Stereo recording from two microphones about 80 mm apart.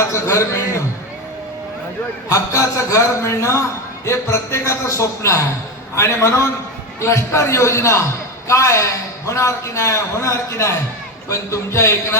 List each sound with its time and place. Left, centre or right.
0.0 s a man's voice: left
2.3 s a man's voice: left